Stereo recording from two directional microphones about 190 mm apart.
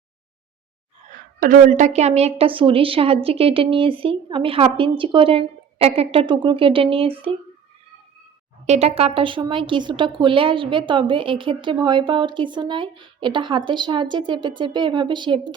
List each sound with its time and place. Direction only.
1.4 s speech: 45° right (ahead or behind)
8.6 s speech: 35° right (ahead or behind)